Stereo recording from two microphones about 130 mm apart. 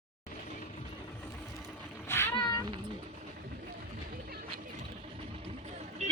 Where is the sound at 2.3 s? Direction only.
30° left (ahead or behind).